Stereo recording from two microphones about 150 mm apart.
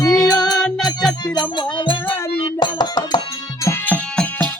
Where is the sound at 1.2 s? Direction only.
30° left (ahead or behind).